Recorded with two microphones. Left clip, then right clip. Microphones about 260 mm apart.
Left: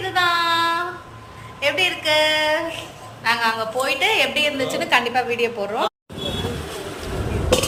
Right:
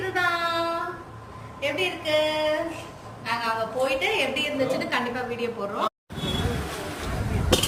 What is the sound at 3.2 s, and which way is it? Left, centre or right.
A woman's voice, centre.